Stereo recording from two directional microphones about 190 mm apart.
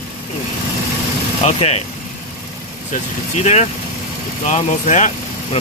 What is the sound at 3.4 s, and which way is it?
Speech, 35° left (ahead or behind).